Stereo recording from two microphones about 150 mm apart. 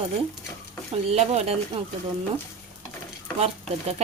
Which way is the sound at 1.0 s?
45° right (ahead or behind).